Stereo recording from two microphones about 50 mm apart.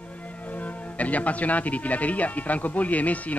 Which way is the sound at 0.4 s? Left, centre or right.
Left.